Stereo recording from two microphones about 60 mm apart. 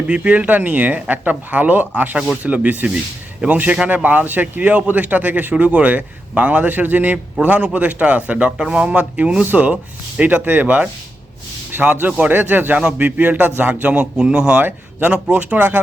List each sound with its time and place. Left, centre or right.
0.1 s a man's voice: right